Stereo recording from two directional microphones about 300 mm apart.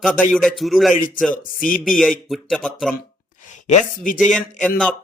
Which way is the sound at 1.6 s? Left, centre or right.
Left.